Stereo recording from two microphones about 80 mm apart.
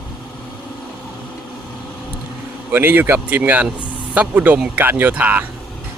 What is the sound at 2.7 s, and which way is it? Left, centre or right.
Speech, right.